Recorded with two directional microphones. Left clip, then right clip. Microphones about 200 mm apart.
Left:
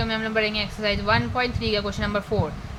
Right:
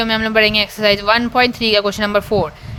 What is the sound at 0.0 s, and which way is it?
Speech, 50° right (ahead or behind).